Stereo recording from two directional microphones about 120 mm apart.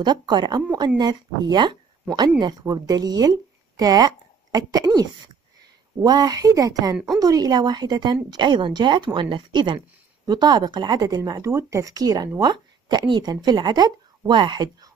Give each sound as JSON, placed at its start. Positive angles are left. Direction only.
{"t": 0.0, "sound": "speech", "side_deg": -40}